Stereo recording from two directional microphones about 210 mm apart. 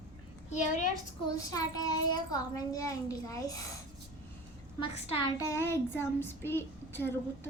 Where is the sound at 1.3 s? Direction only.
15° left (ahead or behind).